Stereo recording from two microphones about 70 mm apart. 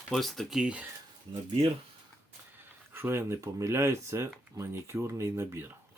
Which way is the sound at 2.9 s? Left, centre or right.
Right.